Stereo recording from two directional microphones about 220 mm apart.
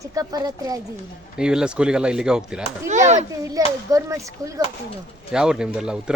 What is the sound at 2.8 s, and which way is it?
Speech, 30° right (ahead or behind).